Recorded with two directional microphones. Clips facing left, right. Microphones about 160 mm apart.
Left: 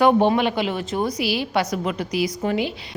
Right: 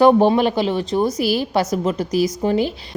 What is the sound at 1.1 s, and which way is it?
A woman's voice, 45° right (ahead or behind).